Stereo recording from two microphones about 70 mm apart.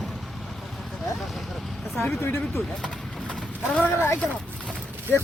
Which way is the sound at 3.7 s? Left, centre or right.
Centre.